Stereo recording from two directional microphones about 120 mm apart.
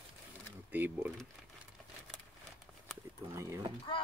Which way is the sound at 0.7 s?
15° right (ahead or behind).